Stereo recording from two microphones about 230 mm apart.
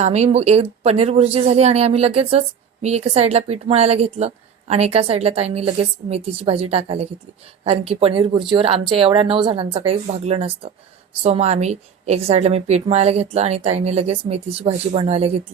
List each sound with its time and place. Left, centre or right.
0.0 s a woman's voice: right